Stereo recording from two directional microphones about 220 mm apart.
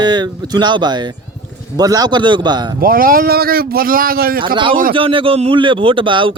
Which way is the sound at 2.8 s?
40° right (ahead or behind).